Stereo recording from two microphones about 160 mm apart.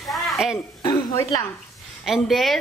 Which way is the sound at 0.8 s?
20° left (ahead or behind).